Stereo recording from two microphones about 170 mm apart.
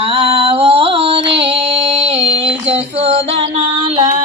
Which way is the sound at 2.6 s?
35° right (ahead or behind).